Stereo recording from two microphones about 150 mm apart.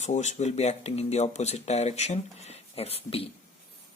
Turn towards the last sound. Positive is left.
turn(degrees=40)  # may be behind; listen again after turning